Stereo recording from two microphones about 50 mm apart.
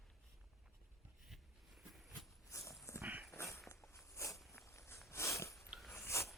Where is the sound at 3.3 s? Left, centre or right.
Left.